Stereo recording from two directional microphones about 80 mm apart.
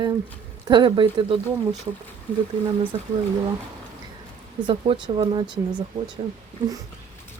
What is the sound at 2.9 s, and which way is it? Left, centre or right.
Speech, right.